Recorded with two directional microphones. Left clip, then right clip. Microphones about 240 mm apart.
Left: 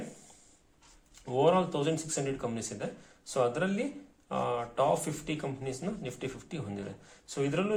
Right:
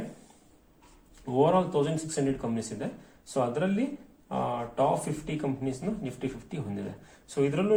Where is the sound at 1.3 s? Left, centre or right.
Left.